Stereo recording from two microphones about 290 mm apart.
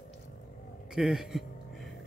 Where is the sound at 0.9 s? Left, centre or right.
Centre.